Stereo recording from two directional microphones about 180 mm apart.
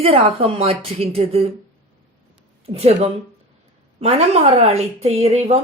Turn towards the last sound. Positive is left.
turn(degrees=-35)  # may be behind; listen again after turning